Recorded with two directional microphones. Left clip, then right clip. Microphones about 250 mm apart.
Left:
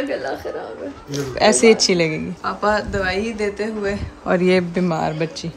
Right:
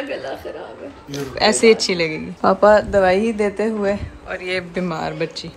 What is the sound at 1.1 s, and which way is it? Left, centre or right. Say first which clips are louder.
A woman's voice: left 2 dB; centre.